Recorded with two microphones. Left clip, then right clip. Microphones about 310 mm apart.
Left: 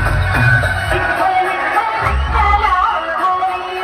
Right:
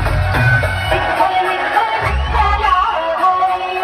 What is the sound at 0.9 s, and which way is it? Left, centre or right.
Music, right.